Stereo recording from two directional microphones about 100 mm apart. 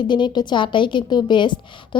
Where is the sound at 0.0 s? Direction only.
50° left (ahead or behind).